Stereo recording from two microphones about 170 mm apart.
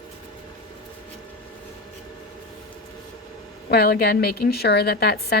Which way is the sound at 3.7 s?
70° left (ahead or behind).